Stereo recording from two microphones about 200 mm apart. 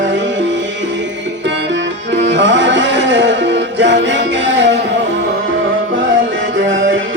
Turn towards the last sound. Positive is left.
turn(degrees=-65)  # may be behind; listen again after turning